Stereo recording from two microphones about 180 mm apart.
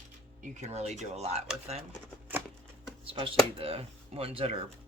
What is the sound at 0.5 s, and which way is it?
Speech, 40° right (ahead or behind).